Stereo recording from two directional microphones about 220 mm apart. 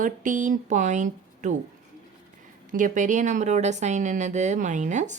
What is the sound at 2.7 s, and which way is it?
Speech, 35° right (ahead or behind).